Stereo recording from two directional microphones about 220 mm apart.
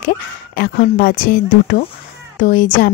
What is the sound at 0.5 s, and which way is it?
Speech, 40° left (ahead or behind).